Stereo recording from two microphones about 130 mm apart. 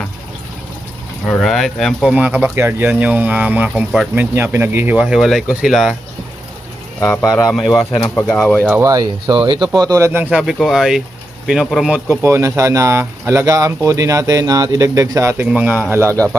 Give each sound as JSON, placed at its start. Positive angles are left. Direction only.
{"t": 1.3, "sound": "speech", "side_deg": 0}
{"t": 2.1, "sound": "speech", "side_deg": -10}
{"t": 7.0, "sound": "speech", "side_deg": 20}
{"t": 7.4, "sound": "speech", "side_deg": 0}
{"t": 8.0, "sound": "speech", "side_deg": 20}
{"t": 8.8, "sound": "speech", "side_deg": -30}
{"t": 12.2, "sound": "speech", "side_deg": -20}
{"t": 15.4, "sound": "speech", "side_deg": -10}
{"t": 15.9, "sound": "speech", "side_deg": -20}